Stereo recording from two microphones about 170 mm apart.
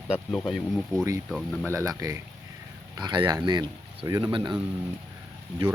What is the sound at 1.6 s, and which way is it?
Speech, 20° right (ahead or behind).